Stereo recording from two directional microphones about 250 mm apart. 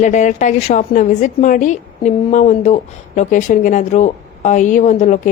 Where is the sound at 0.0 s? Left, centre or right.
Left.